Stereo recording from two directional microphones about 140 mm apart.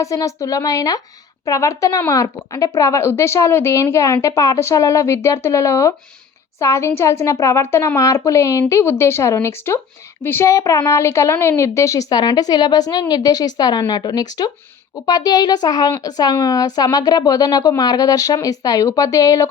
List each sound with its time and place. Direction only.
0.0 s speech: 25° left (ahead or behind)